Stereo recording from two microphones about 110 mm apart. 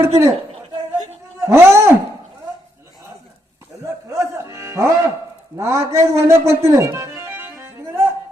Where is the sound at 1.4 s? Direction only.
25° right (ahead or behind).